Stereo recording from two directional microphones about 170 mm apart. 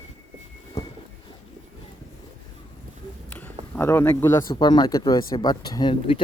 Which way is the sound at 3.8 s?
15° left (ahead or behind).